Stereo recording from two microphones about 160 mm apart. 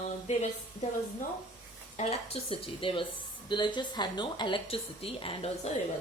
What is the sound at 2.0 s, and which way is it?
Speech, 40° left (ahead or behind).